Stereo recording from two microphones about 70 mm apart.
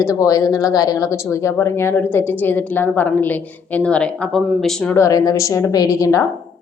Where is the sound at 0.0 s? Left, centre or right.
Left; by 4.3 s centre.